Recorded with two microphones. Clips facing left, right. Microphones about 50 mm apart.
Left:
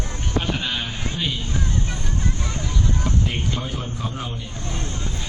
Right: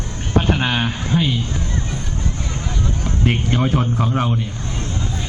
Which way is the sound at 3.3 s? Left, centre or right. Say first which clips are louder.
Right 8 dB; right.